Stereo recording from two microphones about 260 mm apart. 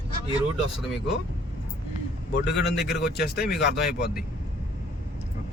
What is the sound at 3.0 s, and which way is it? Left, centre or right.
Speech, left.